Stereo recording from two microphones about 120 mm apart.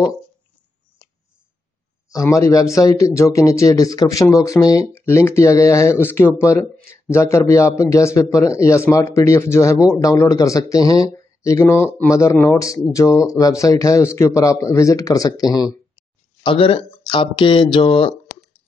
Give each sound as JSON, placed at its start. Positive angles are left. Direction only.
{"t": 2.2, "sound": "speech", "side_deg": 25}
{"t": 16.4, "sound": "speech", "side_deg": 50}